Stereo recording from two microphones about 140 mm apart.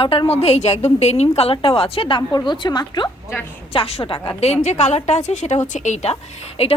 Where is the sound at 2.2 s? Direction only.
25° left (ahead or behind).